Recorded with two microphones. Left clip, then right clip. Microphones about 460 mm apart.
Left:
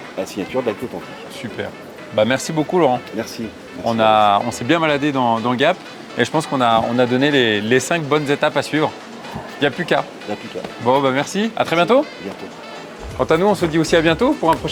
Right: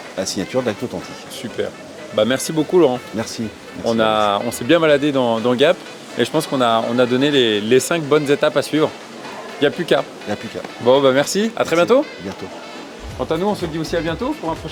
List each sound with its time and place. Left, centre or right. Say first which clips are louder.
0.2 s speech: right 2 dB; right
2.1 s speech: even; centre
13.1 s speech: left 5 dB; left